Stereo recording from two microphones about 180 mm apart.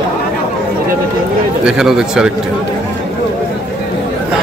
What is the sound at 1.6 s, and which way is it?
Speech, 5° right (ahead or behind).